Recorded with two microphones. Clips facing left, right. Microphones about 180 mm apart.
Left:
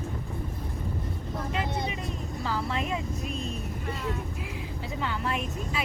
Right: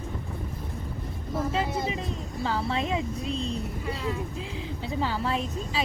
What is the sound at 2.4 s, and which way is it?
A woman's voice, 30° right (ahead or behind).